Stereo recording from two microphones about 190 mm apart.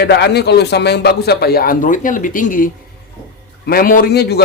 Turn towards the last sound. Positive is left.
turn(degrees=60)  # may be behind; listen again after turning